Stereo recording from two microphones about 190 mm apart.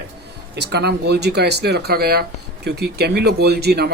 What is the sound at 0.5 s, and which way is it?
Speech, 60° right (ahead or behind).